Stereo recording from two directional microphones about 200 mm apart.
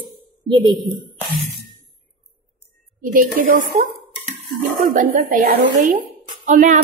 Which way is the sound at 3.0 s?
40° right (ahead or behind).